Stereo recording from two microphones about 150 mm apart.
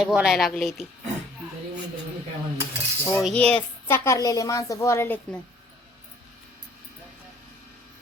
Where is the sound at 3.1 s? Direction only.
Centre (ahead or behind).